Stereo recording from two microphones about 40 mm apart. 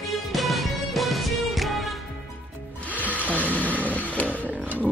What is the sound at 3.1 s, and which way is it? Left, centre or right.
Music, right.